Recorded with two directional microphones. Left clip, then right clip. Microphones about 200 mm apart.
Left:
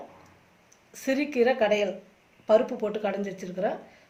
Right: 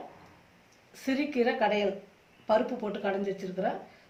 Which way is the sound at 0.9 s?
50° left (ahead or behind).